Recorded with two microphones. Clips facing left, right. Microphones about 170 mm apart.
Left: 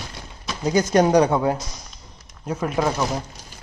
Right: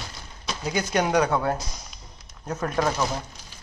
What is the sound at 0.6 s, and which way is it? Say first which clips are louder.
Speech: left 7 dB; 35° left (ahead or behind).